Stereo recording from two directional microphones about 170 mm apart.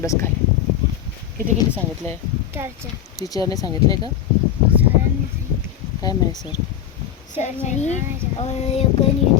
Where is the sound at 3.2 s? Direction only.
20° left (ahead or behind).